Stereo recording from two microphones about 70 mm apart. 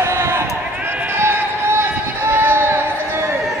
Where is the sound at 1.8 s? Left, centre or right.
Right.